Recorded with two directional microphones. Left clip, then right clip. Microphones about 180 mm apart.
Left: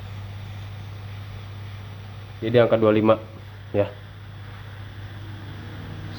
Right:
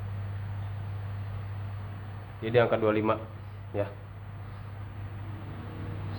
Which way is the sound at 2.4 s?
60° left (ahead or behind).